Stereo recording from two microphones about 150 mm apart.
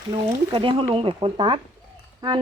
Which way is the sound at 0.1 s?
35° right (ahead or behind).